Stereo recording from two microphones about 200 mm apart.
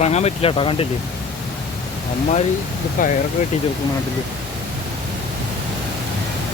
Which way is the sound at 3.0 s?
40° left (ahead or behind).